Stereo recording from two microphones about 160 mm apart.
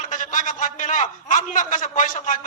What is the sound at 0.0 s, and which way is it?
A man's voice, 55° left (ahead or behind).